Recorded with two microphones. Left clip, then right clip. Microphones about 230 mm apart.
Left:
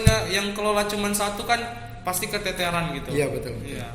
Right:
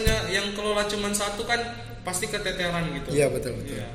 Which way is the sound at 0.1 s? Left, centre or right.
Left.